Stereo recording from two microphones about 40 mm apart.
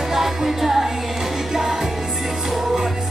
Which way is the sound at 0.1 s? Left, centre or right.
Centre.